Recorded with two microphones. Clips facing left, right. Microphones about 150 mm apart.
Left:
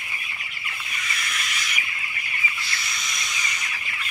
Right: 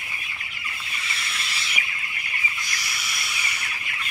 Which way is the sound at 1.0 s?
30° right (ahead or behind).